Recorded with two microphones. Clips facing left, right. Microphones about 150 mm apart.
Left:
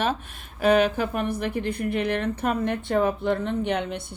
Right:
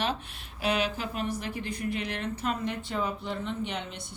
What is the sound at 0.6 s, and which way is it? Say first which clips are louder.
A woman's voice: left 9 dB; 55° left (ahead or behind).